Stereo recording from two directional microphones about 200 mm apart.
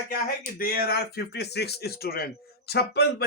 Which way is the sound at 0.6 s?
50° left (ahead or behind).